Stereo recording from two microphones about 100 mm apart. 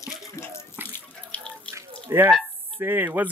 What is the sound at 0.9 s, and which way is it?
Water, 15° left (ahead or behind).